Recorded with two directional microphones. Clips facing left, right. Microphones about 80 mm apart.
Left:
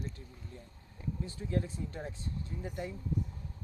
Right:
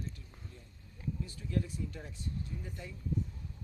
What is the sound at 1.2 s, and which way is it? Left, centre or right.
Speech, left.